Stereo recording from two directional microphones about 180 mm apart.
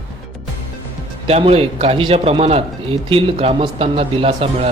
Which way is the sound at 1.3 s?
35° right (ahead or behind).